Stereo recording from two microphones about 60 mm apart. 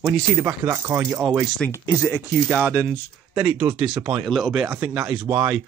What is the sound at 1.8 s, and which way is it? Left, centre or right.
Speech, left.